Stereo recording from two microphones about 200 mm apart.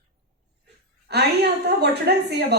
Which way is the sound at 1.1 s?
55° right (ahead or behind).